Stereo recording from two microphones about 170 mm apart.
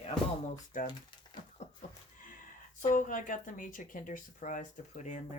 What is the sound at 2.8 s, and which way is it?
Speech, 50° left (ahead or behind).